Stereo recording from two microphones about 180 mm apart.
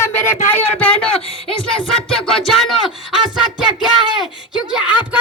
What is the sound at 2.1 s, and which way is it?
Music, centre (ahead or behind).